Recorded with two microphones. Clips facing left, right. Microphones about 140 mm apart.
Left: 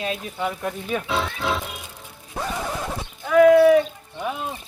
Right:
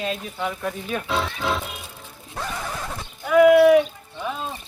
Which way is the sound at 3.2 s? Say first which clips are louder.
Even; 10° right (ahead or behind).